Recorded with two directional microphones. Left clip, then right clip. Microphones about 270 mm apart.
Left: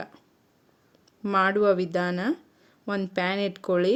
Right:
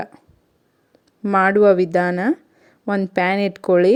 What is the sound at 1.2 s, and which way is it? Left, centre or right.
A woman's voice, right.